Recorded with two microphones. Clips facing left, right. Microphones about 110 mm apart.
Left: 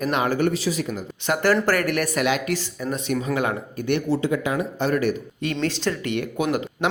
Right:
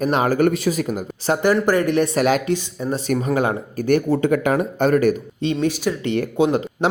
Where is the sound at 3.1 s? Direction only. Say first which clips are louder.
Right 4 dB; 40° right (ahead or behind).